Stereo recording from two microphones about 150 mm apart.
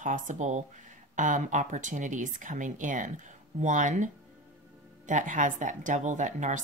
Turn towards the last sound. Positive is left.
turn(degrees=-55)  # may be behind; listen again after turning